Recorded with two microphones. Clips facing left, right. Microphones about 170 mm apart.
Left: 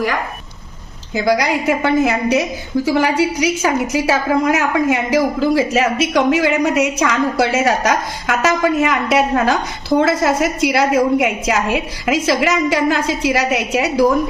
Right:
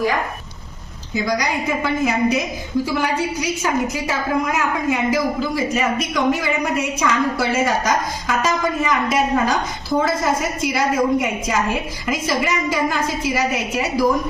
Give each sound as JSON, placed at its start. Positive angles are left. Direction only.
{"t": 1.1, "sound": "a woman's voice", "side_deg": 75}
{"t": 2.8, "sound": "a woman's voice", "side_deg": 90}